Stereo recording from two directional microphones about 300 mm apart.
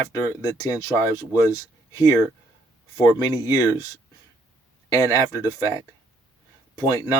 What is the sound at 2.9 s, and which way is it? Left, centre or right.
Speech, centre.